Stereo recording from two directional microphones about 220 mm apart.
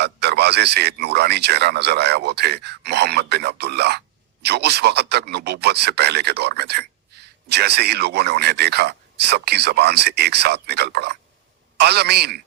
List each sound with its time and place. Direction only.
0.0 s speech: 50° right (ahead or behind)